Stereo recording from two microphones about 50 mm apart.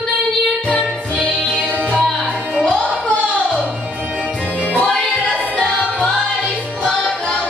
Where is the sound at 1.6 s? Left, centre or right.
Right.